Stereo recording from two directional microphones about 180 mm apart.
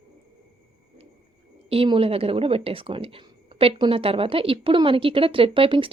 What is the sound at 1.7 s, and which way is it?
Speech, 30° right (ahead or behind).